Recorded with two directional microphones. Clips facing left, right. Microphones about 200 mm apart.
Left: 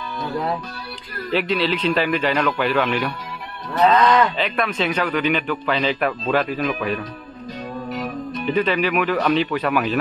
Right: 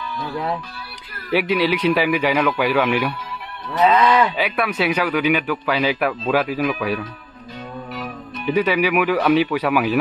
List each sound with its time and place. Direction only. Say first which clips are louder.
1.3 s speech: right 2 dB; 10° right (ahead or behind)
8.5 s speech: right 2 dB; 10° right (ahead or behind)